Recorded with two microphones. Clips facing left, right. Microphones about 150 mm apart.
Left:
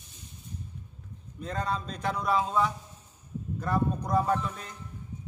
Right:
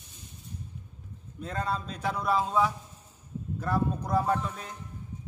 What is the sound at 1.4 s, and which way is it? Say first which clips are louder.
A man's voice: even; 5° right (ahead or behind).